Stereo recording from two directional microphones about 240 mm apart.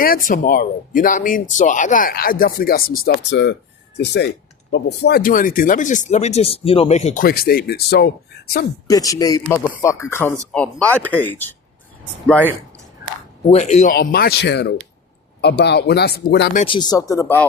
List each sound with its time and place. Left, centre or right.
0.0 s speech: left
8.9 s speech: centre
13.5 s speech: left
13.9 s speech: left
16.6 s speech: left